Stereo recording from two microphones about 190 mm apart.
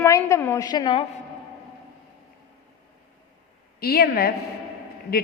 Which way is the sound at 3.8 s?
55° left (ahead or behind).